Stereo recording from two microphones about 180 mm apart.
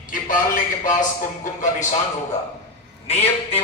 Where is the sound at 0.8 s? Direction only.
45° left (ahead or behind).